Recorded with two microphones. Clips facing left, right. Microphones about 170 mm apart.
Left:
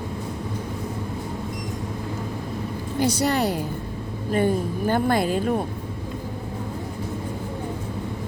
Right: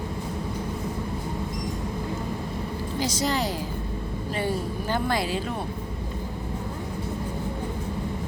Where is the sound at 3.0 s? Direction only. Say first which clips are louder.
Left 5 dB; 60° left (ahead or behind).